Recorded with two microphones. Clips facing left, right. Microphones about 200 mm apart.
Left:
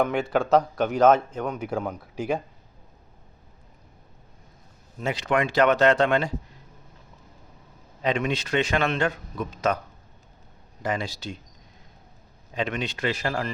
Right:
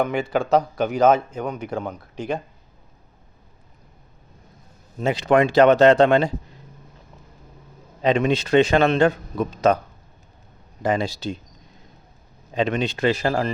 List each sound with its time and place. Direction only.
0.0 s a man's voice: centre (ahead or behind)
4.9 s speech: 30° right (ahead or behind)
8.0 s speech: 30° right (ahead or behind)
10.8 s speech: 30° right (ahead or behind)
12.5 s speech: 30° right (ahead or behind)